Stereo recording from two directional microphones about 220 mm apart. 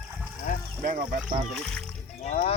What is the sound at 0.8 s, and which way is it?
Speech, 35° right (ahead or behind).